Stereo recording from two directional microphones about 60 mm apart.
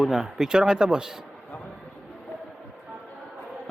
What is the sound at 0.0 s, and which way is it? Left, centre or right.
Speech, centre.